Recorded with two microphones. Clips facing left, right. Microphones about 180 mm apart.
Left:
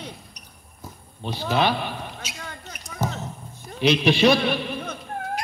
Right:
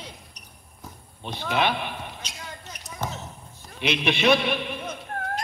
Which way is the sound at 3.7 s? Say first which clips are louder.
Left 6 dB; 35° left (ahead or behind).